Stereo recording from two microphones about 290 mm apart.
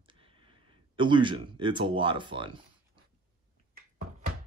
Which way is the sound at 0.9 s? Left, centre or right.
Centre.